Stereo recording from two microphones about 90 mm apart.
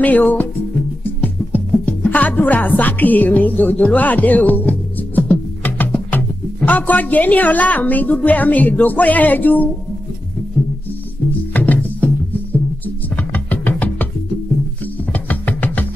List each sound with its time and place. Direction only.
0.0 s speech: 20° left (ahead or behind)
1.2 s music: 20° left (ahead or behind)
11.5 s music: 20° left (ahead or behind)
15.1 s music: 20° left (ahead or behind)